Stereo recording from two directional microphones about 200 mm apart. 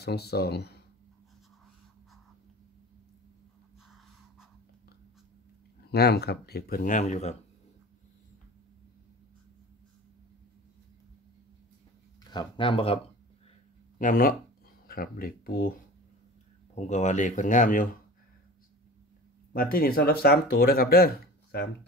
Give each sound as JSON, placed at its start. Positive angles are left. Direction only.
{"t": 0.0, "sound": "speech", "side_deg": 55}
{"t": 5.9, "sound": "speech", "side_deg": 55}
{"t": 12.3, "sound": "speech", "side_deg": 25}
{"t": 13.9, "sound": "speech", "side_deg": 45}
{"t": 16.7, "sound": "speech", "side_deg": 35}
{"t": 19.5, "sound": "speech", "side_deg": 45}